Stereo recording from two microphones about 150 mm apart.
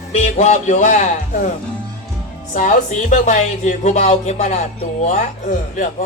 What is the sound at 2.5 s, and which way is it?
Speech, 60° left (ahead or behind).